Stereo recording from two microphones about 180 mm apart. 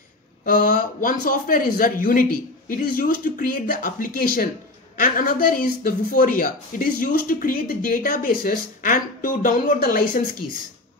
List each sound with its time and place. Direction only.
0.5 s speech: 50° left (ahead or behind)